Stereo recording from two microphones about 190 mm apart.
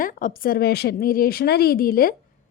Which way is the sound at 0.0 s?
45° left (ahead or behind).